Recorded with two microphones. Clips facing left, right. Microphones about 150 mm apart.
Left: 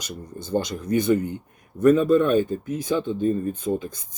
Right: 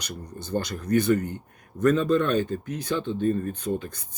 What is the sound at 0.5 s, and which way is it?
Speech, 10° left (ahead or behind).